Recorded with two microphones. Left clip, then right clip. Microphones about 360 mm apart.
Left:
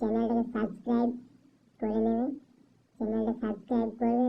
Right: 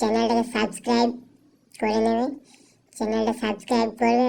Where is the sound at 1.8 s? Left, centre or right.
Right.